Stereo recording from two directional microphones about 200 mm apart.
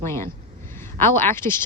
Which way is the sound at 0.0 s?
15° left (ahead or behind).